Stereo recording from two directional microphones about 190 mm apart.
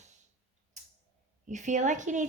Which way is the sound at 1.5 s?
40° right (ahead or behind).